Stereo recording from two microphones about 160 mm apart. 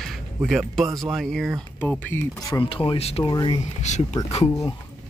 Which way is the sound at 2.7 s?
35° left (ahead or behind).